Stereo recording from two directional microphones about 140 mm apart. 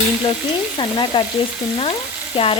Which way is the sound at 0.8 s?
35° left (ahead or behind).